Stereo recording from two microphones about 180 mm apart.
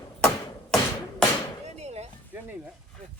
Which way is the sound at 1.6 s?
40° right (ahead or behind).